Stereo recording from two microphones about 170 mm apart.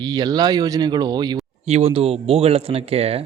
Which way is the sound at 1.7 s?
40° right (ahead or behind).